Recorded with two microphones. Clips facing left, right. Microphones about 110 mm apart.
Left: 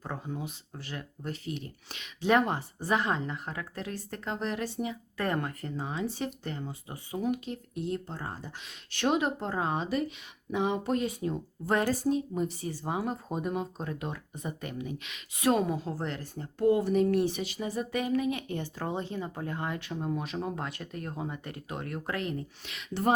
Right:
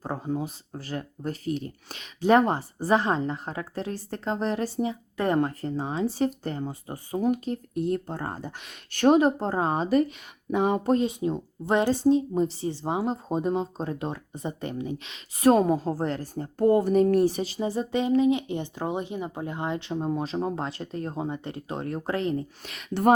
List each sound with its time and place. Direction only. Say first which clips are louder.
0.0 s speech: right 7 dB; 35° right (ahead or behind)
5.1 s speech: right 7 dB; 20° right (ahead or behind); by 10.9 s 45° right (ahead or behind)
10.9 s speech: right 6 dB; 25° right (ahead or behind)
22.6 s speech: right 6 dB; 45° right (ahead or behind)